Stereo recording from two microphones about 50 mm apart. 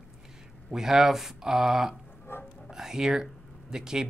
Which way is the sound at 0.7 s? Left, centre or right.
Centre.